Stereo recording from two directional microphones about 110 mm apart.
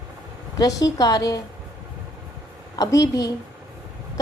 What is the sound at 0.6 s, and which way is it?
Speech, 30° left (ahead or behind).